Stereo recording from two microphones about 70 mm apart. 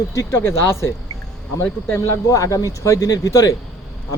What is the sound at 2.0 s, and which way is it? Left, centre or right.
Speech, left.